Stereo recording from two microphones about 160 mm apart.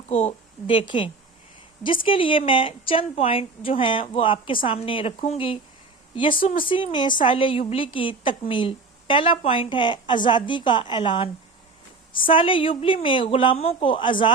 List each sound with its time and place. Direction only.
0.1 s a woman's voice: 40° left (ahead or behind)
12.3 s a woman's voice: 30° left (ahead or behind)